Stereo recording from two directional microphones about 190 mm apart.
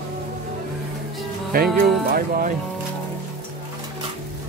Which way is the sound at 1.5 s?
50° right (ahead or behind).